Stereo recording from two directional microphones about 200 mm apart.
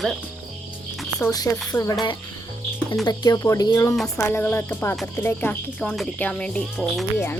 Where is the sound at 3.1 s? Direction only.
20° left (ahead or behind).